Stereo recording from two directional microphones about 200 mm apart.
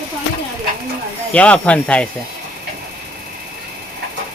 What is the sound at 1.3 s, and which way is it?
Speech, 5° left (ahead or behind).